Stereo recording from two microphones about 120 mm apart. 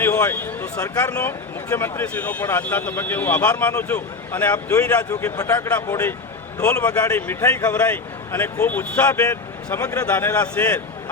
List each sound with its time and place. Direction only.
0.0 s speech: 20° left (ahead or behind)